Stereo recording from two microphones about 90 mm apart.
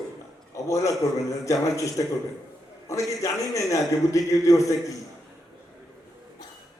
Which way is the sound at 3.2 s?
35° left (ahead or behind).